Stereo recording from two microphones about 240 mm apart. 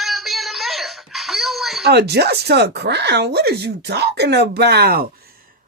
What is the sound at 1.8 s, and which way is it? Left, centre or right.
A woman's voice, right.